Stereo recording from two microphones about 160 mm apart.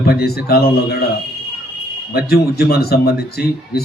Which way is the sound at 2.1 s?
75° left (ahead or behind).